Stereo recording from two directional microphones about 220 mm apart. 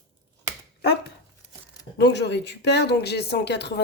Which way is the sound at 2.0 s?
50° left (ahead or behind).